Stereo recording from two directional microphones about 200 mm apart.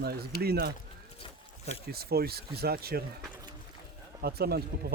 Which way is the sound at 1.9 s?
50° right (ahead or behind).